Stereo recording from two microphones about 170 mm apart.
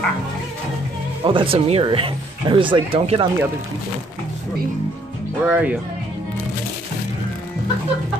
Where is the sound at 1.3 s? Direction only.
30° right (ahead or behind).